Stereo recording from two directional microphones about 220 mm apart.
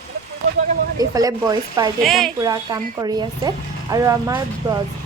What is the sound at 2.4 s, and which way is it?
Speech, 15° right (ahead or behind).